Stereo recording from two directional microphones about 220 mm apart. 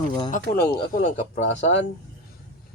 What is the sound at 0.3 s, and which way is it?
Speech, 40° left (ahead or behind).